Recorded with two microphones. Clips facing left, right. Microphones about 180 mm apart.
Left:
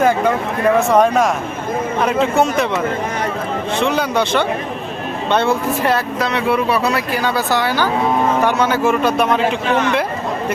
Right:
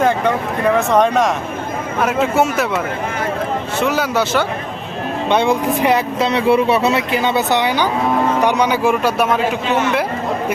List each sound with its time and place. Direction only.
0.9 s speech: centre (ahead or behind)
3.8 s a man's voice: 5° right (ahead or behind)
6.2 s a man's voice: 25° right (ahead or behind); by 10.0 s 5° right (ahead or behind)